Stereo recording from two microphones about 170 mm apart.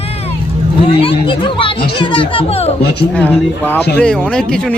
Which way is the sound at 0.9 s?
30° left (ahead or behind).